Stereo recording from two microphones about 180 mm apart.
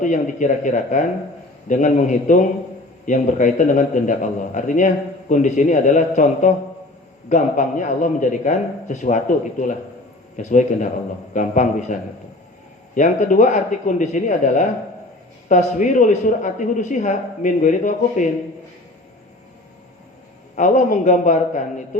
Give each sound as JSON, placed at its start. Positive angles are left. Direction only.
{"t": 0.0, "sound": "speech", "side_deg": 45}
{"t": 20.6, "sound": "speech", "side_deg": 45}